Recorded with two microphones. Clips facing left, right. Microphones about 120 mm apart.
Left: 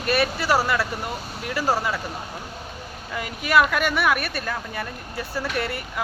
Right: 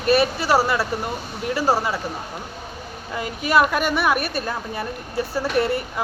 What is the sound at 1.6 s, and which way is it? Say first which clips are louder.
Speech: right 2 dB; 30° right (ahead or behind).